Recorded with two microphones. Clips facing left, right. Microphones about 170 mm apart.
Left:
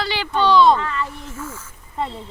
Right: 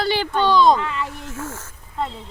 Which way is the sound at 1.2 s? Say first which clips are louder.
Right 1 dB; 80° right.